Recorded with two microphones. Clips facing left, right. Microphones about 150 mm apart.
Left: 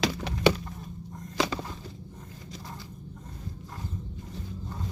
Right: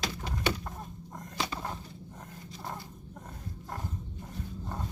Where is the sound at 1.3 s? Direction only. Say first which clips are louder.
Left 7 dB; 90° left.